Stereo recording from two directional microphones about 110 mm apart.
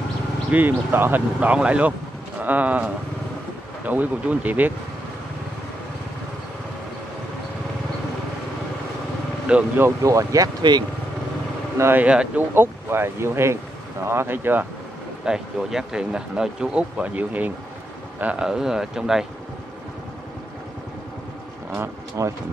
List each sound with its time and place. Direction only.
0.5 s speech: 15° right (ahead or behind)
9.5 s speech: 10° right (ahead or behind)
9.8 s speech: 30° right (ahead or behind)
11.8 s speech: 15° right (ahead or behind)
12.5 s speech: 20° right (ahead or behind)
15.2 s speech: 5° right (ahead or behind)
22.2 s speech: 30° right (ahead or behind)